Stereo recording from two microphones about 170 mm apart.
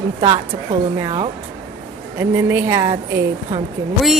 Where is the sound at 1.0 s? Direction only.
30° right (ahead or behind).